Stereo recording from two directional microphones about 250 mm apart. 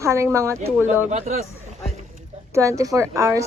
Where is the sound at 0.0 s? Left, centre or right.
Centre.